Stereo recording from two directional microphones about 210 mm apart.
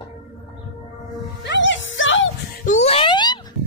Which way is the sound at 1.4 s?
60° left (ahead or behind).